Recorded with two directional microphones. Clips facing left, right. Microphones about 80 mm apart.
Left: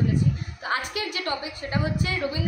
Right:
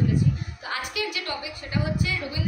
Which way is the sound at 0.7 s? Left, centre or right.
Left.